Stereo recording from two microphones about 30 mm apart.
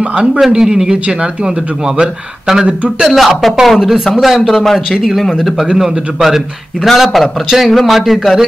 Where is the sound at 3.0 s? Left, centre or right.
Centre.